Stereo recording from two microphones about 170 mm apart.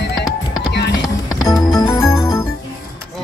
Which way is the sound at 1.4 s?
20° left (ahead or behind).